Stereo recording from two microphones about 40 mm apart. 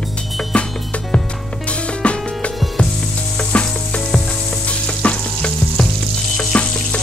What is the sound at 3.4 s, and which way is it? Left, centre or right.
Sizzle, left.